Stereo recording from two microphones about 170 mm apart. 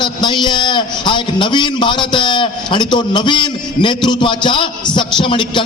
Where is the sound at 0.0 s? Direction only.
25° left (ahead or behind).